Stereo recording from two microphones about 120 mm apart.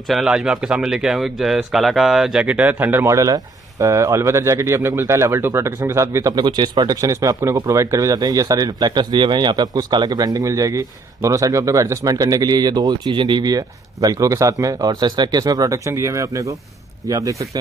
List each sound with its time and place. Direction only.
0.1 s speech: 5° right (ahead or behind); by 6.4 s 25° right (ahead or behind)
6.4 s speech: 40° right (ahead or behind)